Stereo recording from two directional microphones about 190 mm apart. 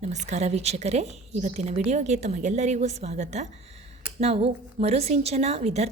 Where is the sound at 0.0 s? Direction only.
35° right (ahead or behind).